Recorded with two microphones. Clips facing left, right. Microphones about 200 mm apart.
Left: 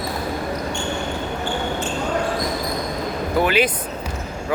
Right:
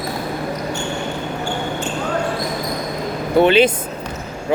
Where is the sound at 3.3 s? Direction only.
25° right (ahead or behind).